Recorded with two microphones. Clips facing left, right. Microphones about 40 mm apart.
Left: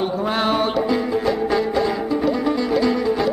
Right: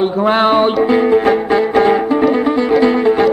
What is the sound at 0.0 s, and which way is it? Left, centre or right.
Music, right.